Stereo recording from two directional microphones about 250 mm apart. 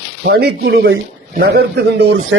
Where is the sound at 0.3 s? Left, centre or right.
Right.